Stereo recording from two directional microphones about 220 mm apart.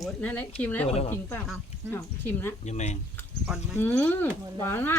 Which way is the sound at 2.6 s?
30° left (ahead or behind).